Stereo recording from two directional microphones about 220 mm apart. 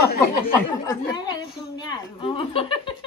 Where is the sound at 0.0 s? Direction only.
45° left (ahead or behind).